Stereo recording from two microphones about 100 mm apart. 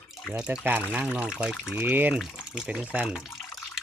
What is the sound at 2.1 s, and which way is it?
Speech, 5° right (ahead or behind).